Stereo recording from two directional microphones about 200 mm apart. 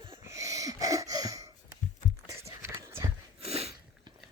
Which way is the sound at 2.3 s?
15° right (ahead or behind).